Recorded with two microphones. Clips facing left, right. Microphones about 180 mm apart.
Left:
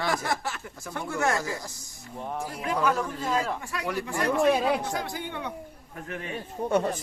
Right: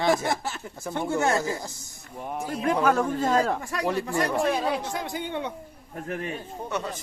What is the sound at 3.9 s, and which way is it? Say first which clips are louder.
Speech: right 1 dB; 25° right (ahead or behind).